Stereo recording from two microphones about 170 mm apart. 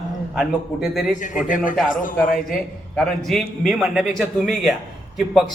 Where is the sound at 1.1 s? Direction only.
50° left (ahead or behind).